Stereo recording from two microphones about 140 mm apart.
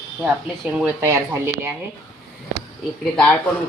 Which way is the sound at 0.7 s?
15° right (ahead or behind).